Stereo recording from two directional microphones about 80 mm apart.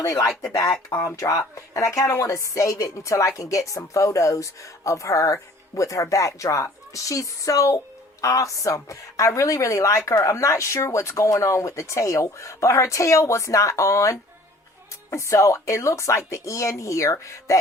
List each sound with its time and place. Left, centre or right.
0.0 s a woman's voice: left